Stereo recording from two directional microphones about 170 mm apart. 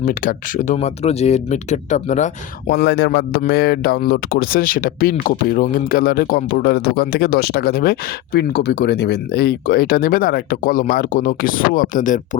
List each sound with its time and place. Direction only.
0.0 s speech: 50° left (ahead or behind)
2.6 s speech: 75° left (ahead or behind); by 12.4 s 50° left (ahead or behind)